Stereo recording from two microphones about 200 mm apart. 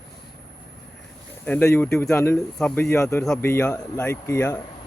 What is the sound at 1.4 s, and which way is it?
Speech, 10° left (ahead or behind).